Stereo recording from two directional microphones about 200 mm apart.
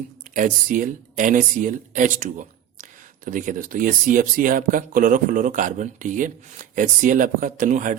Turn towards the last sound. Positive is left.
turn(degrees=-40)  # may be behind; listen again after turning